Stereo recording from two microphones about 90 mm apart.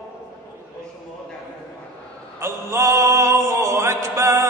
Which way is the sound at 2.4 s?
30° right (ahead or behind).